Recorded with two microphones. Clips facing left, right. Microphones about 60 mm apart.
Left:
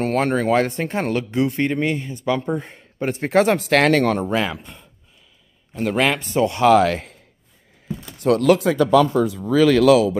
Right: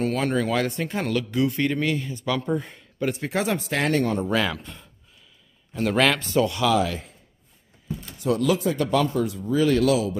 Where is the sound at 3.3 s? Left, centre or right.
Left.